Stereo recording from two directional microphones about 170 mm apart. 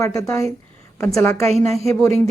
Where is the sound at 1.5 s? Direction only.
40° right (ahead or behind).